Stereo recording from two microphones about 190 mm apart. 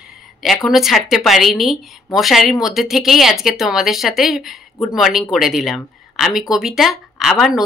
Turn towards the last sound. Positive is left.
turn(degrees=0)  # may be behind; listen again after turning